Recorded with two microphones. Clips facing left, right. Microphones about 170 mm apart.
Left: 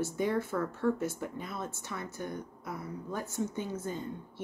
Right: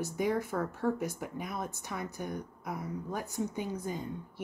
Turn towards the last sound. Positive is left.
turn(degrees=-15)  # may be behind; listen again after turning